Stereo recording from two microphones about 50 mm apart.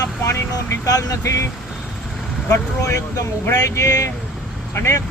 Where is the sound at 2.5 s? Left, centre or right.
Left.